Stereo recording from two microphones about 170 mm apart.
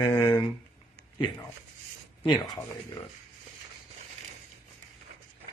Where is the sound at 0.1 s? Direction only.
30° left (ahead or behind).